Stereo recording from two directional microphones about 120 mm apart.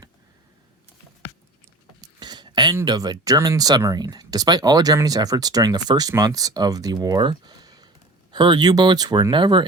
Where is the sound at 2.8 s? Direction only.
35° right (ahead or behind).